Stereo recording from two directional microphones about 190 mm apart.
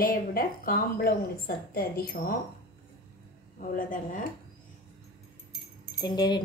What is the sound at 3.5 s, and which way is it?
Speech, 45° left (ahead or behind).